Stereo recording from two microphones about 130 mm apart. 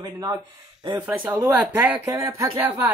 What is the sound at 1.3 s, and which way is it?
Speech, 20° right (ahead or behind).